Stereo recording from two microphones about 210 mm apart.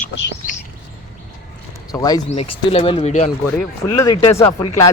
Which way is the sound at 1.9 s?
15° left (ahead or behind).